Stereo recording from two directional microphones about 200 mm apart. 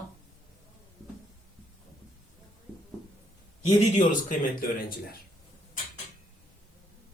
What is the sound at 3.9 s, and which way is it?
Speech, 40° left (ahead or behind).